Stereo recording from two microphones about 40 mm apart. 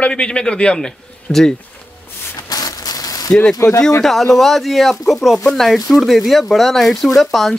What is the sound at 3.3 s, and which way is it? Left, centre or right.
Speech, left.